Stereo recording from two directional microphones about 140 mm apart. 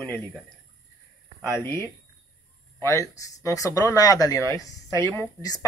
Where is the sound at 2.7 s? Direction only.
20° left (ahead or behind).